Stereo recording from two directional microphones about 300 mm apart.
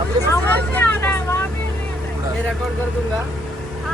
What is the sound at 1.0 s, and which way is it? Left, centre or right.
Vehicle, centre.